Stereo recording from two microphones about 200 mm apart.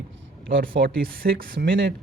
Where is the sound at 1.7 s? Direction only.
65° right (ahead or behind).